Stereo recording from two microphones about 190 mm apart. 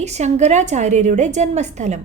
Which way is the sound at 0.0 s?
35° right (ahead or behind).